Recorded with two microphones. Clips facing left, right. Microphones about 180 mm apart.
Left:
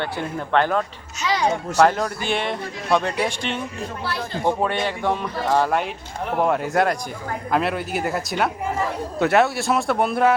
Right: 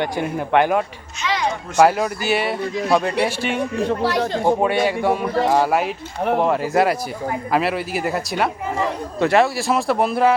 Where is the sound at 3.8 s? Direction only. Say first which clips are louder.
Right 9 dB; 75° right (ahead or behind).